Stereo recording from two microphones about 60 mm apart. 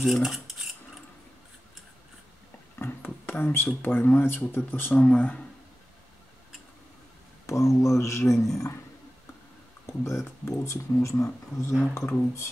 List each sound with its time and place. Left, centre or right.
0.0 s cutlery: centre
2.8 s a sound: left
3.8 s speech: left
4.9 s speech: centre
7.4 s speech: left
9.8 s speech: left